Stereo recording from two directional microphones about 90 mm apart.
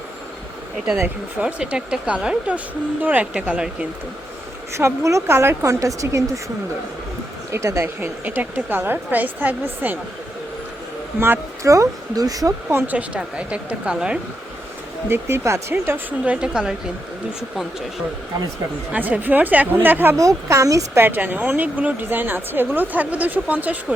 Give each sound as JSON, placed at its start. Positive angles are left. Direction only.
{"t": 1.4, "sound": "a woman's voice", "side_deg": -15}
{"t": 4.7, "sound": "speech", "side_deg": -35}
{"t": 7.5, "sound": "speech", "side_deg": -35}
{"t": 8.2, "sound": "speech", "side_deg": -20}
{"t": 11.2, "sound": "speech", "side_deg": -30}
{"t": 12.7, "sound": "a woman's voice", "side_deg": -15}
{"t": 15.1, "sound": "a woman's voice", "side_deg": -30}
{"t": 18.9, "sound": "speech", "side_deg": -15}
{"t": 20.1, "sound": "speech", "side_deg": -35}
{"t": 21.0, "sound": "speech", "side_deg": -20}